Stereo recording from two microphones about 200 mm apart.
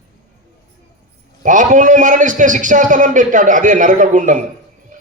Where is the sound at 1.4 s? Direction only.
40° right (ahead or behind).